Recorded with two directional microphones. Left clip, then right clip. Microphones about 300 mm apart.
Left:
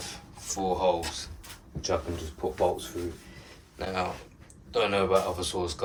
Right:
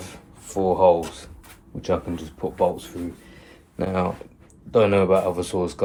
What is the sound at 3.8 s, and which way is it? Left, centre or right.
Speech, centre.